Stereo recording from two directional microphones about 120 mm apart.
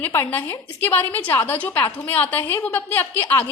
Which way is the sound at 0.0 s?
15° left (ahead or behind).